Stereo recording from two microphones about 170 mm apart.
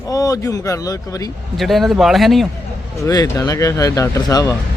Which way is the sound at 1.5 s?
Centre (ahead or behind).